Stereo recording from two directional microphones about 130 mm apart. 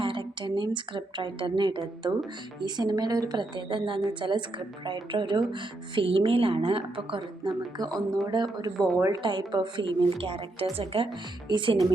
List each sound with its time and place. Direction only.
0.0 s speech: 40° right (ahead or behind)
7.9 s speech: 5° left (ahead or behind)
8.3 s speech: 35° right (ahead or behind)